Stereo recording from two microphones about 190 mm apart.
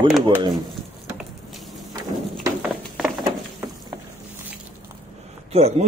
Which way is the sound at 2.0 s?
20° right (ahead or behind).